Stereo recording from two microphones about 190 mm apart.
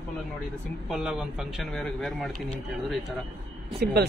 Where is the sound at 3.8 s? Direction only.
60° right (ahead or behind).